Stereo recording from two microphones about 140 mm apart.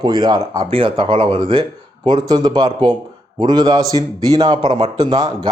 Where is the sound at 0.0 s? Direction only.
30° right (ahead or behind).